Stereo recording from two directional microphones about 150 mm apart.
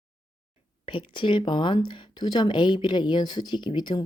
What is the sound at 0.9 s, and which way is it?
Speech, 35° left (ahead or behind).